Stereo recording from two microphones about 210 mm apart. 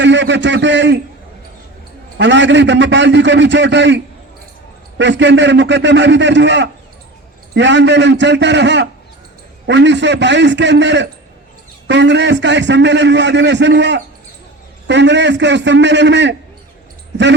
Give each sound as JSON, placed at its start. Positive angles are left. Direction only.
{"t": 0.0, "sound": "a man's voice", "side_deg": -60}
{"t": 2.1, "sound": "a man's voice", "side_deg": -60}